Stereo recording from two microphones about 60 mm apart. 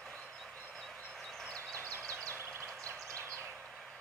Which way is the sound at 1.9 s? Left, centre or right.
Right.